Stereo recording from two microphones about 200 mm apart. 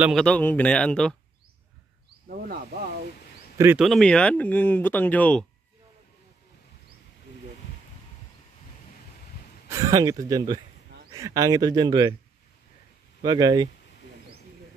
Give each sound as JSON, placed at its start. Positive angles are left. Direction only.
{"t": 0.0, "sound": "a man's voice", "side_deg": 0}
{"t": 2.2, "sound": "speech", "side_deg": -50}
{"t": 3.5, "sound": "speech", "side_deg": -10}
{"t": 3.8, "sound": "speech", "side_deg": 5}
{"t": 9.7, "sound": "speech", "side_deg": -15}
{"t": 13.2, "sound": "speech", "side_deg": -20}